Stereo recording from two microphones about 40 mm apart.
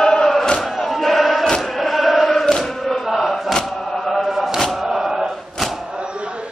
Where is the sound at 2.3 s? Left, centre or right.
Centre.